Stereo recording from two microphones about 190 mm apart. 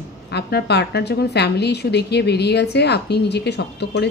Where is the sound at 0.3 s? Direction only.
60° left (ahead or behind).